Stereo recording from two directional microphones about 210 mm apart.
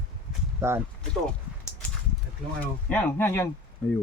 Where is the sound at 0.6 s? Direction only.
10° right (ahead or behind).